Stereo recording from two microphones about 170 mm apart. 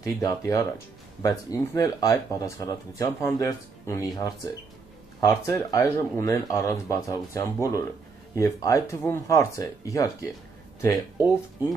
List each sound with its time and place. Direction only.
0.0 s speech: 20° left (ahead or behind)